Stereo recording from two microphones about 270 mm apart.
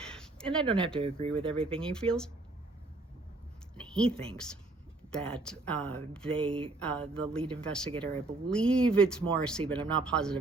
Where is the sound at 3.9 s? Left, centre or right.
Centre.